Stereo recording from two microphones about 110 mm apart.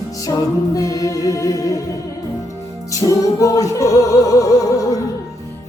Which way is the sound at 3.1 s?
30° left (ahead or behind).